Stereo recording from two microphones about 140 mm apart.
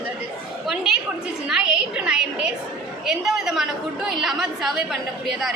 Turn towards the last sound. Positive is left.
turn(degrees=0)  # may be behind; listen again after turning